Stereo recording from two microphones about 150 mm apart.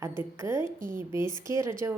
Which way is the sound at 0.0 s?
15° right (ahead or behind).